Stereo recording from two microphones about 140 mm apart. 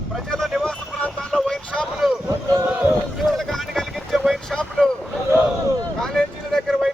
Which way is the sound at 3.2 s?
Centre (ahead or behind).